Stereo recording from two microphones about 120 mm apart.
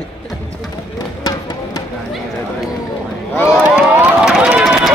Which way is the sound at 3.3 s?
20° left (ahead or behind).